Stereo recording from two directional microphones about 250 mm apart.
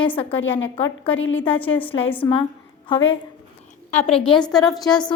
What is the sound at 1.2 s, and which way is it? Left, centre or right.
Speech, left.